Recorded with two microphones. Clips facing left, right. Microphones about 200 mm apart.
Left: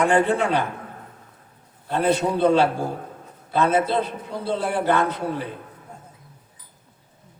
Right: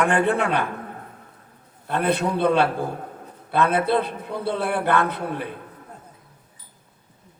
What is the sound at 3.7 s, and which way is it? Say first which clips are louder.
A man's voice: left 2 dB; 60° right (ahead or behind).